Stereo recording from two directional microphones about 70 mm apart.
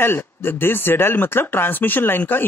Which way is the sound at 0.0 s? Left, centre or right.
Left.